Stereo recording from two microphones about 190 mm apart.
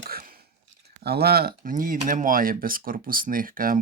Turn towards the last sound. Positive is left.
turn(degrees=-50)  # may be behind; listen again after turning